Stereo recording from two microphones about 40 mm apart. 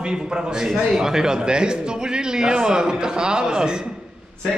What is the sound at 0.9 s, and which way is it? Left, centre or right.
A man's voice, centre.